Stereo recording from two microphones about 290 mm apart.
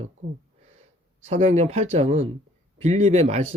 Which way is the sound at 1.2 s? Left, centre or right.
Right.